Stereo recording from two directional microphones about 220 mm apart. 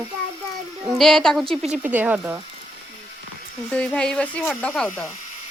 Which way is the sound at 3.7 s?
5° left (ahead or behind).